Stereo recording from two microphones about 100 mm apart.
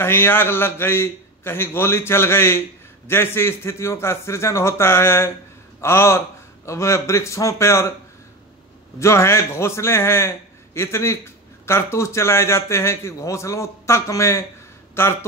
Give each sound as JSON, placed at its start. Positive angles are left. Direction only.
{"t": 0.0, "sound": "a man's voice", "side_deg": 25}
{"t": 9.0, "sound": "a man's voice", "side_deg": 30}